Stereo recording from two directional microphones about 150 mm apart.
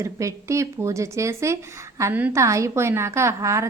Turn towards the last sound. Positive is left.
turn(degrees=-20)  # may be behind; listen again after turning